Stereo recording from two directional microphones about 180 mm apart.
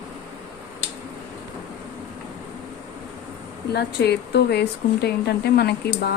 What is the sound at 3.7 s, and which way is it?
Speech, 65° left (ahead or behind).